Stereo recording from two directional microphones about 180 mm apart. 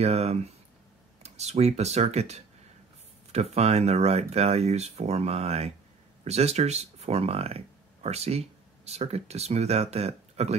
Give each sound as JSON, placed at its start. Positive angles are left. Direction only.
{"t": 0.0, "sound": "speech", "side_deg": -35}